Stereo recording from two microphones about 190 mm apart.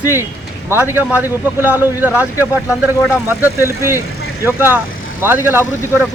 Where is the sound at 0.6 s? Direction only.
10° right (ahead or behind).